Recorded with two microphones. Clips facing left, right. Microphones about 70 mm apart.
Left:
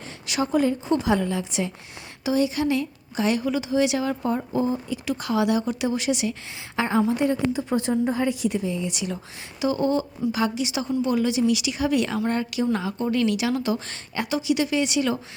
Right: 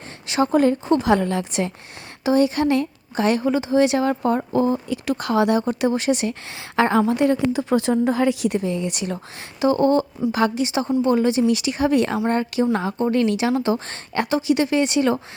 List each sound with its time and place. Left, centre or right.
0.4 s a woman's voice: right
4.2 s speech: right
6.5 s a woman's voice: right